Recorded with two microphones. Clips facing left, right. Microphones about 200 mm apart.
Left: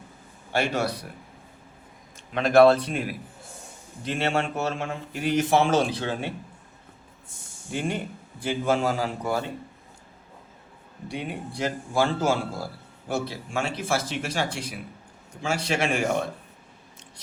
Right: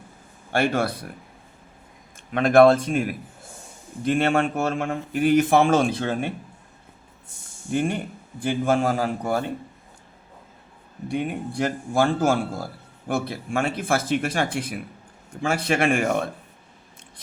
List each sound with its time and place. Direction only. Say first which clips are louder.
0.5 s a man's voice: right 3 dB; 50° right (ahead or behind)
2.3 s a man's voice: right 2 dB; 50° right (ahead or behind)
7.7 s a man's voice: right 5 dB; 55° right (ahead or behind)
11.1 s a man's voice: right 6 dB; 50° right (ahead or behind)